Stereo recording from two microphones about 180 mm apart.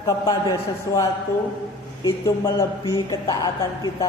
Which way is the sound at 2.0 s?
20° left (ahead or behind).